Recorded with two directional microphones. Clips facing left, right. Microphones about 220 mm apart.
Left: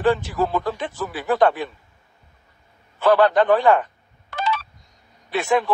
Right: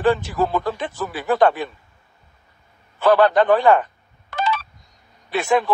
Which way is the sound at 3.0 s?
45° right (ahead or behind).